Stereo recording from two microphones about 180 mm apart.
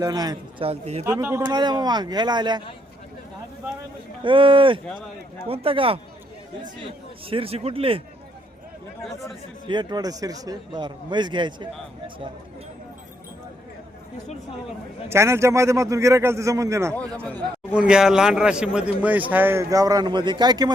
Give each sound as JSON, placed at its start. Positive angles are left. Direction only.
{"t": 0.0, "sound": "a man's voice", "side_deg": -20}
{"t": 0.7, "sound": "a man's voice", "side_deg": -35}
{"t": 1.0, "sound": "a man's voice", "side_deg": -15}
{"t": 4.2, "sound": "a man's voice", "side_deg": -30}
{"t": 7.3, "sound": "a man's voice", "side_deg": -30}
{"t": 9.6, "sound": "a man's voice", "side_deg": -25}
{"t": 15.1, "sound": "a man's voice", "side_deg": -15}
{"t": 17.7, "sound": "a man's voice", "side_deg": -5}